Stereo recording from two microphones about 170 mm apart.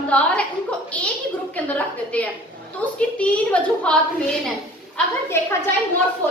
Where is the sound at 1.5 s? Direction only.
10° left (ahead or behind).